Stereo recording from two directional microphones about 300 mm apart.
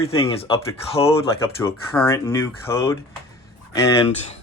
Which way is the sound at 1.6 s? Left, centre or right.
Centre.